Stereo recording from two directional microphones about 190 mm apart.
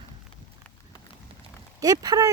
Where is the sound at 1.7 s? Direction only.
20° right (ahead or behind).